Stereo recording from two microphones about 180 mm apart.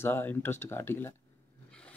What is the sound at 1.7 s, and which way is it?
Filing, 5° left (ahead or behind).